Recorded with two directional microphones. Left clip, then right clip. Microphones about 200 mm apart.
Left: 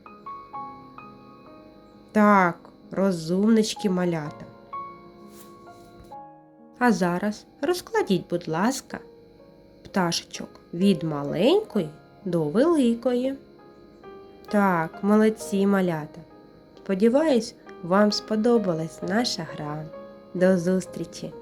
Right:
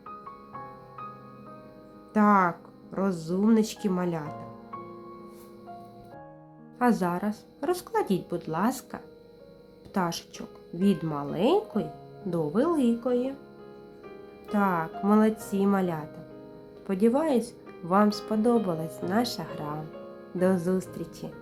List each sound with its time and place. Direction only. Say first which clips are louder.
2.1 s speech: left 3 dB; 15° left (ahead or behind)
6.7 s speech: left 3 dB; 15° left (ahead or behind)
14.4 s speech: left 4 dB; 20° left (ahead or behind)